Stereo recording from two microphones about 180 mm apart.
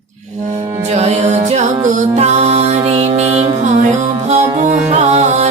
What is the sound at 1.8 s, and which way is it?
Music, 40° right (ahead or behind).